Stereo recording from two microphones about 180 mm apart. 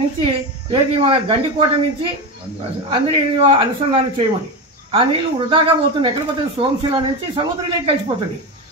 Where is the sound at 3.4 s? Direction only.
30° right (ahead or behind).